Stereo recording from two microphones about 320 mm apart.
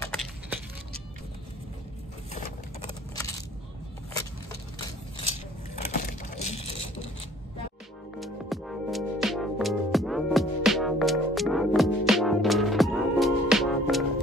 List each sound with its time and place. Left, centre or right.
0.0 s a sound: centre
5.9 s crushing: left
8.2 s music: centre